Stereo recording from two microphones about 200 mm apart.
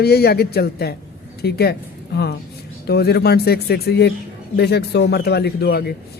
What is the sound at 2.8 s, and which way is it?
A man's voice, 55° left (ahead or behind).